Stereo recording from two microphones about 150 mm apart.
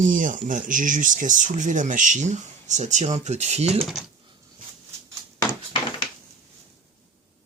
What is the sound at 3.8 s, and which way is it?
Speech, centre (ahead or behind).